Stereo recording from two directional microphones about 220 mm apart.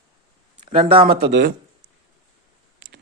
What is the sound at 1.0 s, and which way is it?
Speech, 45° right (ahead or behind).